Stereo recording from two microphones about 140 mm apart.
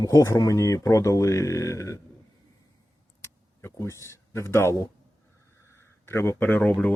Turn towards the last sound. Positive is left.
turn(degrees=10)  # may be behind; listen again after turning